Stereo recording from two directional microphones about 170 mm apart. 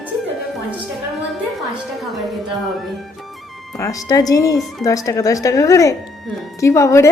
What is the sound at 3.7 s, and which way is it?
A woman's voice, 20° left (ahead or behind).